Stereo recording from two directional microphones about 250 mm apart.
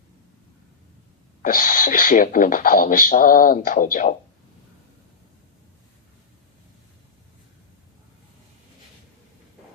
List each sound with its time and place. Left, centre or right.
1.4 s speech: left